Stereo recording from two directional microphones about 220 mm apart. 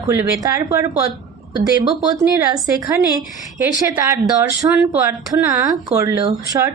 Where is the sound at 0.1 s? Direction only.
10° right (ahead or behind).